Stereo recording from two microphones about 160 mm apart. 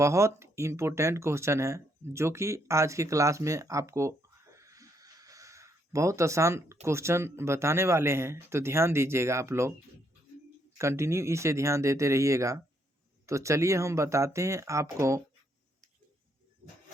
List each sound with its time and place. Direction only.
0.0 s speech: 20° right (ahead or behind)
4.5 s a sound: 20° right (ahead or behind)
6.8 s speech: 15° right (ahead or behind)
10.8 s speech: 15° right (ahead or behind)